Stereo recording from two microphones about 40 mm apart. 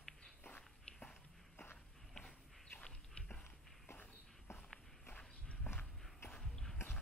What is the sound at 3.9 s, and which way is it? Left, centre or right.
Walk, left.